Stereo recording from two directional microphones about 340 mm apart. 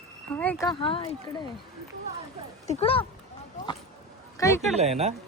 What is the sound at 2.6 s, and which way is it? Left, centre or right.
Speech, centre.